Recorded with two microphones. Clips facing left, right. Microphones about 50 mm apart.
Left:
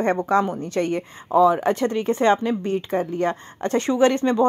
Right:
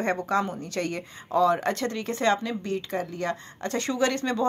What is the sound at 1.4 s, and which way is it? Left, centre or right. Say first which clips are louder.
A woman's voice: left 5 dB; centre.